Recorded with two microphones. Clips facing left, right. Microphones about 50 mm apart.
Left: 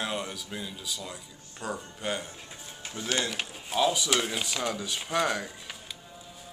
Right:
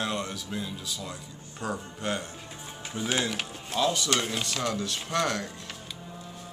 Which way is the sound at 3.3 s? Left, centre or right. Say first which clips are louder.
Right 1 dB; centre.